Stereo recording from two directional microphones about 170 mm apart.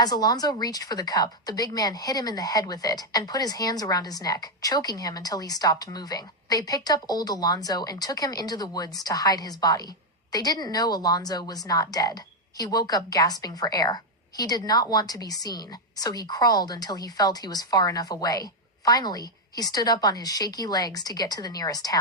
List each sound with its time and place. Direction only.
0.0 s a woman's voice: 20° left (ahead or behind)